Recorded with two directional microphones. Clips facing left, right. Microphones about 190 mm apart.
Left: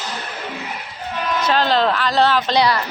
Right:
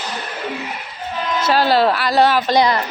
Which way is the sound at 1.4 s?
10° right (ahead or behind).